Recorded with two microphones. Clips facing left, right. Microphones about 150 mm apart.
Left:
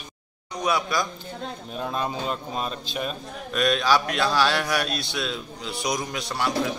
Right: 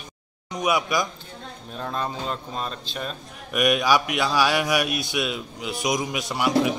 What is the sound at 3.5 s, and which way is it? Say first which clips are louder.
A man's voice: right 1 dB; 15° right (ahead or behind).